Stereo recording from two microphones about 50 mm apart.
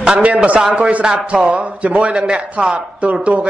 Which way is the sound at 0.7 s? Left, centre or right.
Right.